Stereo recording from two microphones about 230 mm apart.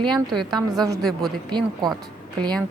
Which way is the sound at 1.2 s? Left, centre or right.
Centre.